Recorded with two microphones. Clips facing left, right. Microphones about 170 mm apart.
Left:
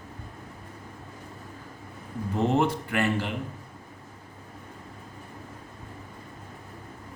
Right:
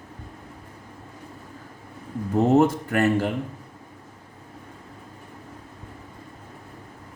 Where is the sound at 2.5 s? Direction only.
45° right (ahead or behind).